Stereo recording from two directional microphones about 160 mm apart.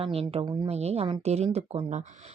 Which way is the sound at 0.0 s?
35° right (ahead or behind).